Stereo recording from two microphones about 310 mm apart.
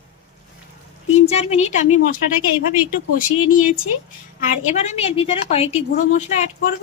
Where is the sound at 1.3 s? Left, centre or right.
Centre.